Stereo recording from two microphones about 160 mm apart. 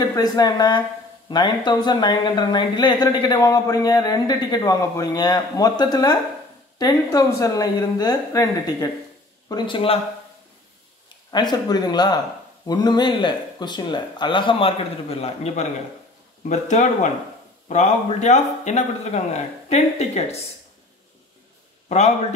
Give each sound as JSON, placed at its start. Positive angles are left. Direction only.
{"t": 0.1, "sound": "speech", "side_deg": 25}
{"t": 11.3, "sound": "speech", "side_deg": 25}
{"t": 21.8, "sound": "a man's voice", "side_deg": 45}